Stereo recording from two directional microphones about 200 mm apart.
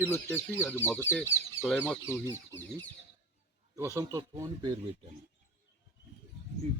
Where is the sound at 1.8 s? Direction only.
10° left (ahead or behind).